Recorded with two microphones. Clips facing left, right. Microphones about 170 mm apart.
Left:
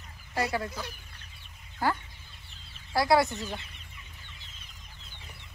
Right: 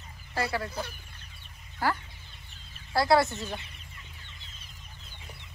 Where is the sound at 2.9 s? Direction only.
15° left (ahead or behind).